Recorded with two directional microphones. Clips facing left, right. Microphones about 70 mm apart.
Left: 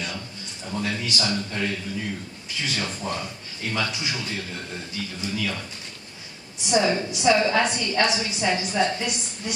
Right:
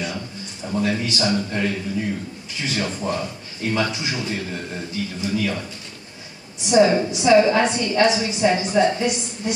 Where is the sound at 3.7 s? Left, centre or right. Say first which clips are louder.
Right 4 dB; right.